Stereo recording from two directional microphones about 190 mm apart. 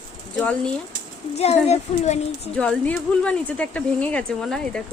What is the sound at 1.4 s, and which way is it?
Speech, 35° left (ahead or behind).